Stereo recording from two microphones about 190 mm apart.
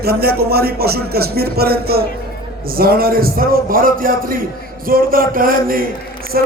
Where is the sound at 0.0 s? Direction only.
55° right (ahead or behind).